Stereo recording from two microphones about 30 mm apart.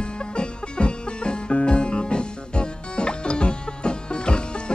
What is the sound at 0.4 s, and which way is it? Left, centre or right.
Music, left.